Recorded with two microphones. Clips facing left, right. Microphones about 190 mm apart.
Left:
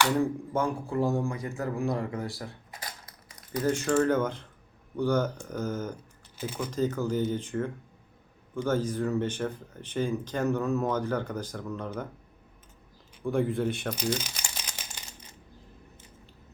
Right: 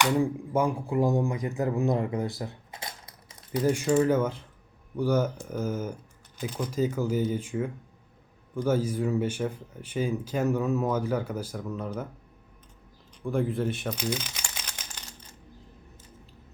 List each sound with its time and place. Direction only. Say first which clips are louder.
0.0 s speech: right 1 dB; 10° right (ahead or behind); by 3.6 s 25° right (ahead or behind)
3.6 s speech: right 2 dB; 15° right (ahead or behind)
6.3 s speech: right 1 dB; centre (ahead or behind)
6.7 s speech: right 1 dB; 10° right (ahead or behind)
13.2 s speech: left 1 dB; centre (ahead or behind)
14.8 s a sound: even; 10° left (ahead or behind)